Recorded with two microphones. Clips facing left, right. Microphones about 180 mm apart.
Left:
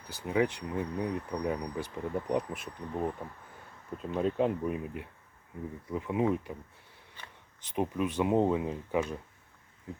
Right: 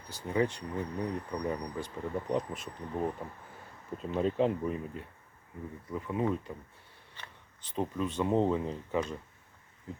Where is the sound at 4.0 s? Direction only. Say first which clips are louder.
Even; centre (ahead or behind).